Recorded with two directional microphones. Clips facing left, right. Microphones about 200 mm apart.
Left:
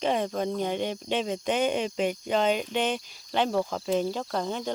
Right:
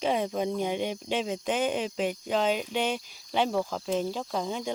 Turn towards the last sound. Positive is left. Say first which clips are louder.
# left 1 dB
turn(degrees=-5)  # may be behind; listen again after turning